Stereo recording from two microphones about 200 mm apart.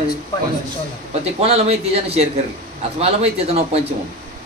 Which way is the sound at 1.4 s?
30° right (ahead or behind).